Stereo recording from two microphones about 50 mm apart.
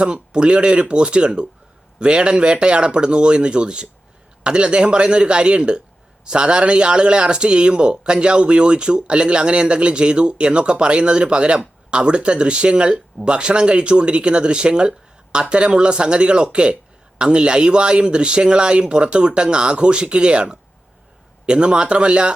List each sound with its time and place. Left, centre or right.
0.0 s speech: centre